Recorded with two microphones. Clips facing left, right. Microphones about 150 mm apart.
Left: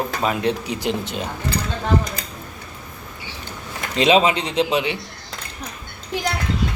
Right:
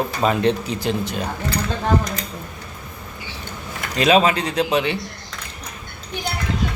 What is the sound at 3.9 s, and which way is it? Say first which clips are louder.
A man's voice: even; 20° left (ahead or behind).